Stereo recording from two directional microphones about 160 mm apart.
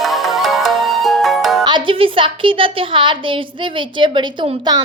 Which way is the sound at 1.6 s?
30° right (ahead or behind).